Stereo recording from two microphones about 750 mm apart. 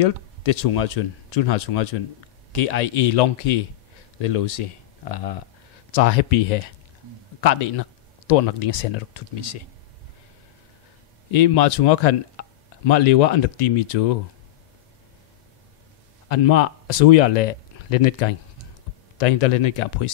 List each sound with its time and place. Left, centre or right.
0.0 s speech: left
11.3 s speech: left
12.4 s a sound: left
12.8 s speech: left
16.3 s speech: left